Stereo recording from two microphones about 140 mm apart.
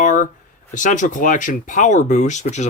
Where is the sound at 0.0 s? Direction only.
65° left (ahead or behind).